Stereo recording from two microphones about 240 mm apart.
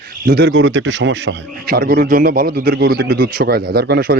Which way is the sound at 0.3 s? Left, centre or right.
Right.